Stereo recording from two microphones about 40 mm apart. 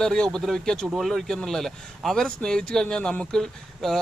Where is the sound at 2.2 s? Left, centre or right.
Centre.